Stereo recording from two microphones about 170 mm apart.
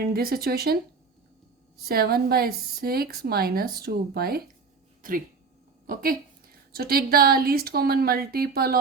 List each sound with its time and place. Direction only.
0.0 s a woman's voice: 65° right (ahead or behind)
1.9 s a woman's voice: 65° right (ahead or behind)
5.9 s a woman's voice: 55° right (ahead or behind)